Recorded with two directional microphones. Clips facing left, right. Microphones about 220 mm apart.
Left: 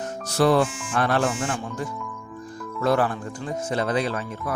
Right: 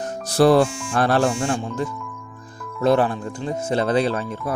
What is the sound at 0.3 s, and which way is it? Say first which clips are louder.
A man's voice: right 4 dB; 35° right (ahead or behind).